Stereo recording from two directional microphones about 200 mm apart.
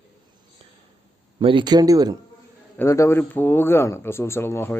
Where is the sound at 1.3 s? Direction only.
25° right (ahead or behind).